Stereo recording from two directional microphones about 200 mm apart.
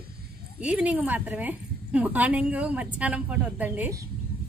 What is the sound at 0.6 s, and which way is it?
A woman's voice, 5° right (ahead or behind).